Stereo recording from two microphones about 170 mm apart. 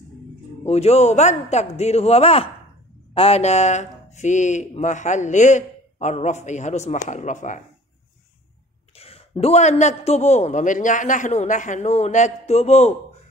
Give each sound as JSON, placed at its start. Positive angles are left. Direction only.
{"t": 0.7, "sound": "a man's voice", "side_deg": 40}
{"t": 8.9, "sound": "a man's voice", "side_deg": 35}